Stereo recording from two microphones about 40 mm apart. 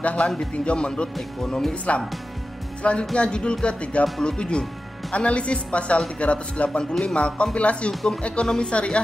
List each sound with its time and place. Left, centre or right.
0.0 s a man's voice: left
4.0 s speech: centre
6.8 s music: centre
7.2 s speech: left
7.9 s music: centre
8.5 s speech: left